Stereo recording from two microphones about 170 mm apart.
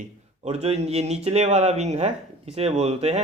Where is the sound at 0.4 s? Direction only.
35° right (ahead or behind).